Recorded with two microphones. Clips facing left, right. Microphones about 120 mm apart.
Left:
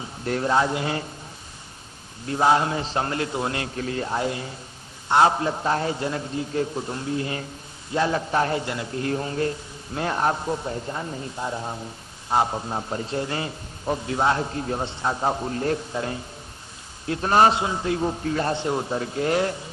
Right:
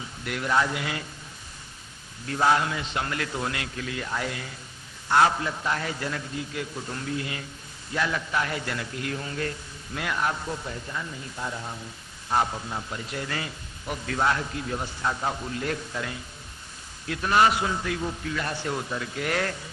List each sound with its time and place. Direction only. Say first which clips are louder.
0.0 s speech: left 6 dB; 35° left (ahead or behind)
2.2 s a man's voice: left 3 dB; 25° left (ahead or behind)
8.6 s a man's voice: left 5 dB; 25° left (ahead or behind); by 11.3 s 40° left (ahead or behind)
11.3 s a man's voice: left 3 dB; 25° left (ahead or behind)
17.6 s a man's voice: left 4 dB; 25° left (ahead or behind)
18.5 s a man's voice: left 5 dB; 25° left (ahead or behind)